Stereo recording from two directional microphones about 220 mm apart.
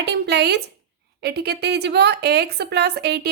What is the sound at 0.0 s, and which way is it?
A woman's voice, 50° right (ahead or behind).